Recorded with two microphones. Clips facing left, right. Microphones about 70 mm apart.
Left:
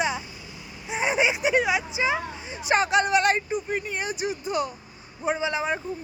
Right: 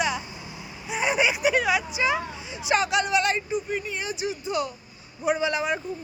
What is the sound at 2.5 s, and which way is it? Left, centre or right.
Speech, left.